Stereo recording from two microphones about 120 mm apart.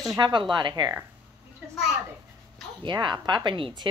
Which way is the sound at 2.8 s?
40° right (ahead or behind).